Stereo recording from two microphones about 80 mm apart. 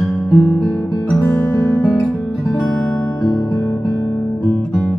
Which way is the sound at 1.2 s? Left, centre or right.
Left.